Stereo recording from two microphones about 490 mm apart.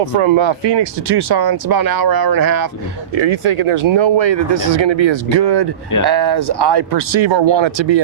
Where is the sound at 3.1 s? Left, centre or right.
Right.